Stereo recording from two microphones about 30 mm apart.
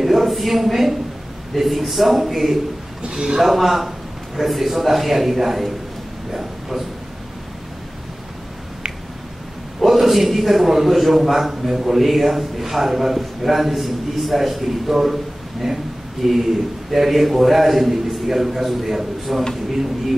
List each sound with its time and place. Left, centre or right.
0.0 s a man's voice: centre
3.1 s a man's voice: right
3.3 s a man's voice: centre
6.3 s a sound: centre
9.8 s a man's voice: centre